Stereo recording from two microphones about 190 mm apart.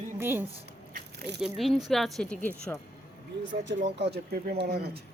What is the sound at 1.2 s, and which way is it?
Speech, 60° right (ahead or behind).